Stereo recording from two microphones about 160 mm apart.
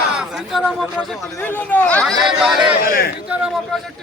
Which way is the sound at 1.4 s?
10° left (ahead or behind).